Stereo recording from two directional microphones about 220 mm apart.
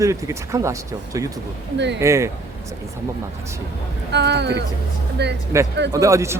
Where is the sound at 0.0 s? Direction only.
15° right (ahead or behind).